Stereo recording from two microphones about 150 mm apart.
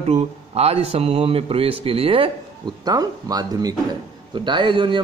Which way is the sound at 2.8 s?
25° right (ahead or behind).